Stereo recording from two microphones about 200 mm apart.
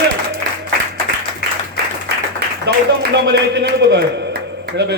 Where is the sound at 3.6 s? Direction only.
55° right (ahead or behind).